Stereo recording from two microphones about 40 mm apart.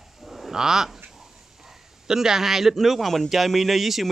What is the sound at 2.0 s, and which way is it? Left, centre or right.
A man's voice, centre.